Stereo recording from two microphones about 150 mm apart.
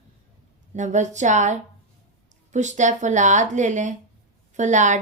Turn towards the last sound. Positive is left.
turn(degrees=-55)  # may be behind; listen again after turning